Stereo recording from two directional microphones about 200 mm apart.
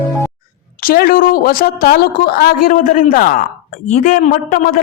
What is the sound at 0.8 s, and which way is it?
A woman's voice, 45° left (ahead or behind).